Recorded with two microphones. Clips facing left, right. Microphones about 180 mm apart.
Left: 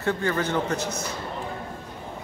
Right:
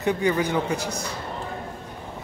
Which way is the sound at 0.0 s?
15° right (ahead or behind).